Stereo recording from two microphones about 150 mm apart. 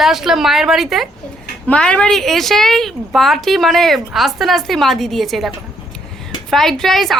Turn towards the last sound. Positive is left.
turn(degrees=0)  # may be behind; listen again after turning